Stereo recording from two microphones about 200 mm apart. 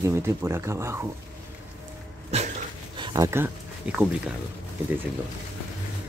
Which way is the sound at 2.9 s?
20° right (ahead or behind).